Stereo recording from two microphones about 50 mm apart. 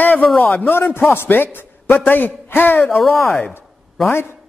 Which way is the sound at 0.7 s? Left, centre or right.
Left.